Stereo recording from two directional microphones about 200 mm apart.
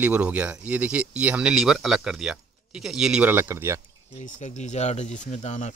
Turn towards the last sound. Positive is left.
turn(degrees=35)  # may be behind; listen again after turning